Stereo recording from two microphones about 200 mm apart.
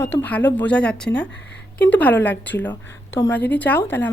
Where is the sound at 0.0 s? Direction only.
10° left (ahead or behind).